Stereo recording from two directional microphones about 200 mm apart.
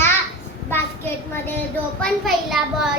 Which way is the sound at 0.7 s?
10° left (ahead or behind).